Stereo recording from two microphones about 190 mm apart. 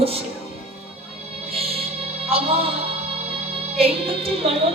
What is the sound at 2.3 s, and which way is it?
Speech, 30° right (ahead or behind).